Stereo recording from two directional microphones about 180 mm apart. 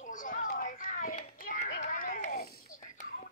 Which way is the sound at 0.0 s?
45° left (ahead or behind).